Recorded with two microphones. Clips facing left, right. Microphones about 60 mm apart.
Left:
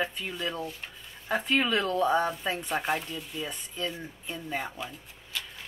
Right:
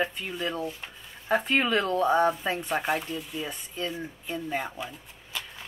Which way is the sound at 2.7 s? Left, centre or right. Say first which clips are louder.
Right 2 dB; centre.